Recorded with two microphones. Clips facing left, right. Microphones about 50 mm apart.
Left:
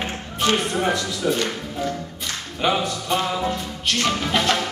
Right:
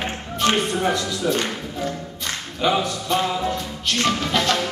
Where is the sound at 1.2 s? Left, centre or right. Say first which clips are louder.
Even; centre.